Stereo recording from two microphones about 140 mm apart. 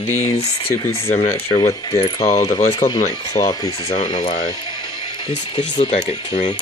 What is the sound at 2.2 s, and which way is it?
Speech, 20° left (ahead or behind).